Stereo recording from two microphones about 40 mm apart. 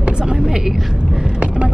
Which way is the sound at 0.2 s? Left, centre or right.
Centre.